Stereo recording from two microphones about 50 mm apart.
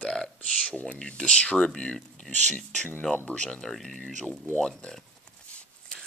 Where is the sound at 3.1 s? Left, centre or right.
Left.